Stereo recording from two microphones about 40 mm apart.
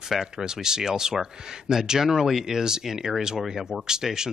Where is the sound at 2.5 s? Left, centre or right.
Centre.